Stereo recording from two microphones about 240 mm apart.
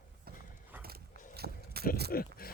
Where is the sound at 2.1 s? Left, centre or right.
Left.